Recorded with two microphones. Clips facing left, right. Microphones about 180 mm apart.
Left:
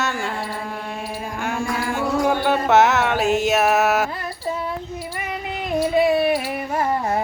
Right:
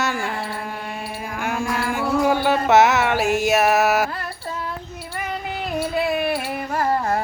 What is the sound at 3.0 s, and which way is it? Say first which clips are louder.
Music: left 1 dB; centre (ahead or behind).